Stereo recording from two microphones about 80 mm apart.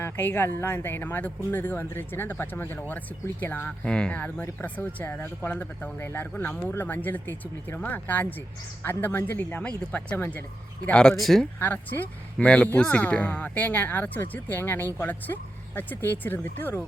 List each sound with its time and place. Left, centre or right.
0.0 s speech: left
3.7 s speech: centre
6.0 s speech: left
10.8 s speech: centre
11.2 s speech: centre
11.6 s speech: left